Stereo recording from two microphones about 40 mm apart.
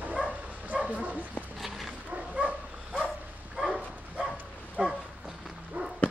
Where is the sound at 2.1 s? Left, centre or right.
Right.